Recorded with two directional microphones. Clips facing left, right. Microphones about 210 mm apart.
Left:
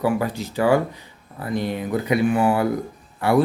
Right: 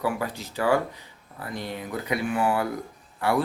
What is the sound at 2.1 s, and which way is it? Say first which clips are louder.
Speech: left 6 dB; 25° left (ahead or behind).